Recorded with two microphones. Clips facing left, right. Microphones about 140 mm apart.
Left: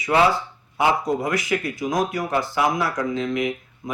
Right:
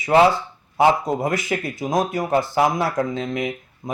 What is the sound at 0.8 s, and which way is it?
Speech, 25° right (ahead or behind).